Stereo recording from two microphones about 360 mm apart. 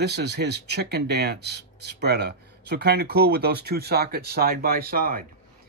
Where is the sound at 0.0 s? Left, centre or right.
Right.